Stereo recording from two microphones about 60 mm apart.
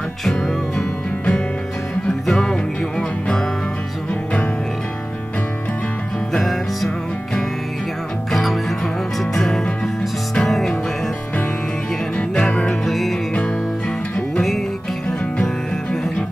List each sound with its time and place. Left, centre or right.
0.2 s music: centre
0.7 s music: centre
6.3 s music: centre
8.3 s music: centre
12.2 s music: centre
13.3 s music: centre